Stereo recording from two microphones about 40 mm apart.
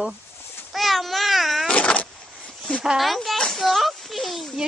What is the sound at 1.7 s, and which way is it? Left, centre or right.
Vehicle, left.